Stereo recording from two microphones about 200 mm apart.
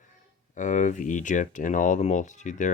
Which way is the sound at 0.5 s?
40° left (ahead or behind).